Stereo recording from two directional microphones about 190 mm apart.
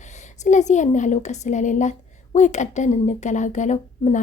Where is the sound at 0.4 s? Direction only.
40° left (ahead or behind).